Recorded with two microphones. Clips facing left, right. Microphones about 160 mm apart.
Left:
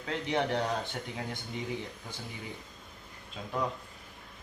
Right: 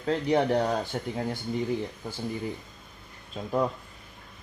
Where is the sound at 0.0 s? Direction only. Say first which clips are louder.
Right 7 dB; 40° right (ahead or behind).